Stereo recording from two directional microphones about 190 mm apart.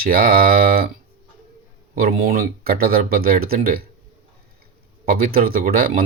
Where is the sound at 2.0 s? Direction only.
50° right (ahead or behind).